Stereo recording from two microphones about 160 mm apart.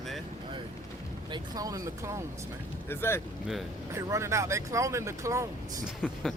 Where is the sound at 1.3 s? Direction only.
25° right (ahead or behind).